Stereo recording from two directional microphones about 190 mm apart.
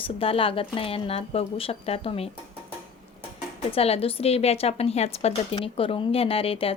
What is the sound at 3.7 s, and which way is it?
Speech, 30° left (ahead or behind).